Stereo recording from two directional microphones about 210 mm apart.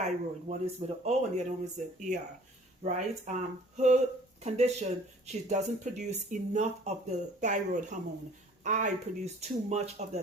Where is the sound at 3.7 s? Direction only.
35° right (ahead or behind).